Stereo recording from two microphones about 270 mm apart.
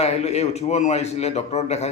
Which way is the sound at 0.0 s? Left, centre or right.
Left.